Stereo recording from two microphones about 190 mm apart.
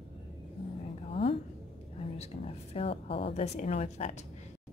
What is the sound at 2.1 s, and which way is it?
A woman's voice, 30° left (ahead or behind).